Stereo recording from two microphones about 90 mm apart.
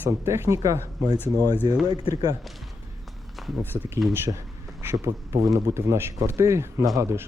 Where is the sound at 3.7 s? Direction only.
20° right (ahead or behind).